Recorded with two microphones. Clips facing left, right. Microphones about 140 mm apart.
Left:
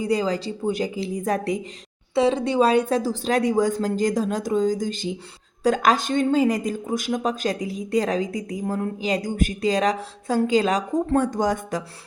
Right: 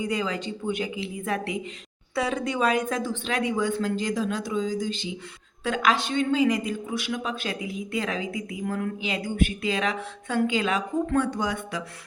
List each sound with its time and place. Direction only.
0.0 s a woman's voice: 35° left (ahead or behind)
2.1 s a woman's voice: 25° left (ahead or behind); by 11.8 s 45° left (ahead or behind)